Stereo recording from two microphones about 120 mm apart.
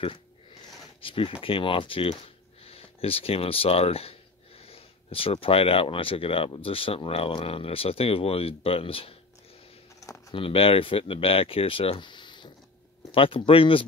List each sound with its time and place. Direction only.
1.0 s speech: 50° left (ahead or behind)
9.9 s a sound: 25° left (ahead or behind)
10.3 s speech: 50° left (ahead or behind)